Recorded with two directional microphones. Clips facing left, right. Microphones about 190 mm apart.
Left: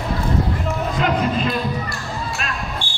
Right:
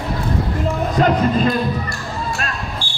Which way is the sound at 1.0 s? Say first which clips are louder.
Right 5 dB; 45° right (ahead or behind).